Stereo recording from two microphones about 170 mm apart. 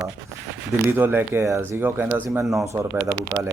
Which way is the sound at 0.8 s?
10° right (ahead or behind).